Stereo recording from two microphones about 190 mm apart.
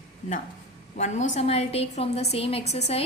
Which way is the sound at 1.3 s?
35° left (ahead or behind).